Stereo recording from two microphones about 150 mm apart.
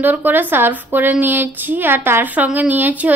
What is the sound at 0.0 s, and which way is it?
A woman's voice, 10° right (ahead or behind).